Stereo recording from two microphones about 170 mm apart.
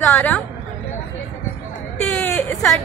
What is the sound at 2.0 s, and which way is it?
Speech, 10° left (ahead or behind).